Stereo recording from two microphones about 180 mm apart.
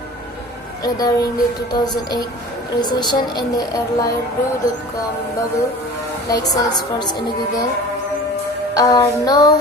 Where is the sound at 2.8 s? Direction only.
25° left (ahead or behind).